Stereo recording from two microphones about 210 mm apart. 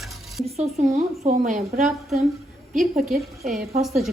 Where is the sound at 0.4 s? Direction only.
30° right (ahead or behind).